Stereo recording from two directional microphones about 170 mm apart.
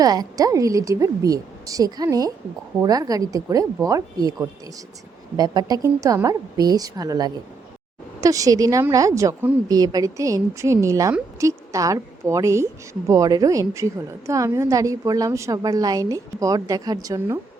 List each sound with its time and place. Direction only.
0.0 s a woman's voice: 20° right (ahead or behind)